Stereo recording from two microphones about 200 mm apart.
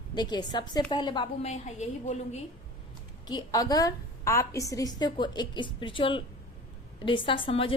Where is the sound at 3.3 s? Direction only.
20° left (ahead or behind).